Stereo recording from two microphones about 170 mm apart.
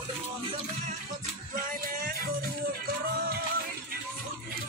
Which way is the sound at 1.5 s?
55° right (ahead or behind).